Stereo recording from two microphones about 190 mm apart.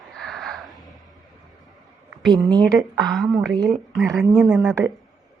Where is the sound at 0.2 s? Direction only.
Centre (ahead or behind).